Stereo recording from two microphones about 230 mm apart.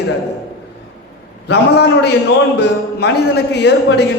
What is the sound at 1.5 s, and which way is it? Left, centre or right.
A man's voice, left.